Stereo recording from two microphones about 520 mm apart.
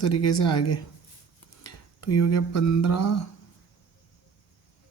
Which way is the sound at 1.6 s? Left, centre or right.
Left.